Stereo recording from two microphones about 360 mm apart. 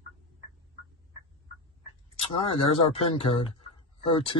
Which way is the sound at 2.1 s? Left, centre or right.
Centre.